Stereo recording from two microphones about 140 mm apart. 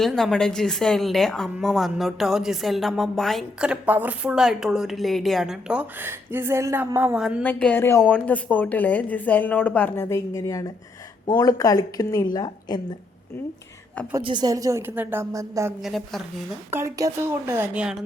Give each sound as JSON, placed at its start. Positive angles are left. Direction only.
{"t": 0.0, "sound": "speech", "side_deg": 5}
{"t": 7.4, "sound": "a woman's voice", "side_deg": 10}
{"t": 14.2, "sound": "a woman's voice", "side_deg": -35}
{"t": 15.8, "sound": "speech", "side_deg": 0}
{"t": 16.7, "sound": "speech", "side_deg": -20}